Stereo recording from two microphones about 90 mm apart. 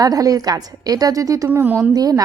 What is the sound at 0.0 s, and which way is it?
A woman's voice, 40° right (ahead or behind).